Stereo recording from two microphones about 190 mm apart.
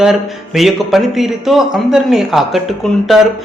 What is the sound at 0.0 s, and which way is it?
A man's voice, centre (ahead or behind).